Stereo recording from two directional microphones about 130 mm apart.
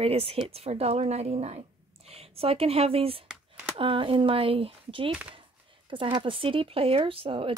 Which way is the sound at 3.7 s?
45° right (ahead or behind).